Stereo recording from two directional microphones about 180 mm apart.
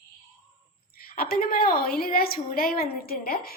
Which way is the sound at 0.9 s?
55° left (ahead or behind).